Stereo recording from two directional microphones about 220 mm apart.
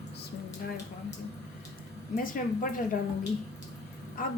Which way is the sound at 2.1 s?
40° left (ahead or behind).